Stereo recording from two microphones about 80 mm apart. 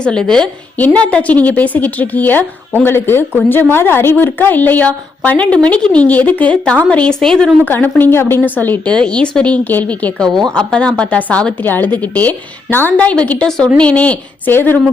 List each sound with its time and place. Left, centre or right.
0.0 s a woman's voice: centre
7.6 s a woman's voice: left
8.9 s a woman's voice: centre
10.2 s a woman's voice: centre; by 14.8 s left